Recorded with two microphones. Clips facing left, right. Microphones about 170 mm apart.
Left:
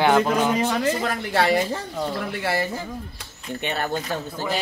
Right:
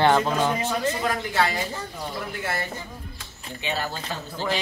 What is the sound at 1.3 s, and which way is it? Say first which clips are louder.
Speech: left 7 dB; 65° left (ahead or behind).